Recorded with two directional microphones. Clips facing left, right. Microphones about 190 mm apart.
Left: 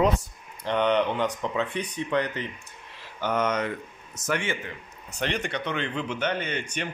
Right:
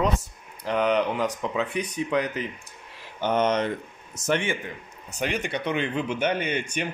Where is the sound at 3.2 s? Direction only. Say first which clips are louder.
Right 3 dB; 25° right (ahead or behind).